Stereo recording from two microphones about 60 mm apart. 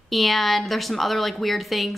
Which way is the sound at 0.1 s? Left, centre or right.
Centre.